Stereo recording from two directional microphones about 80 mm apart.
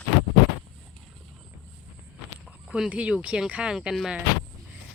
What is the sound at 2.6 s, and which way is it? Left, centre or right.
Speech, centre.